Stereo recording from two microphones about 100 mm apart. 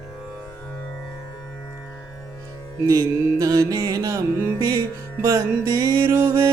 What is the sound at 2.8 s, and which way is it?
Music, 40° right (ahead or behind).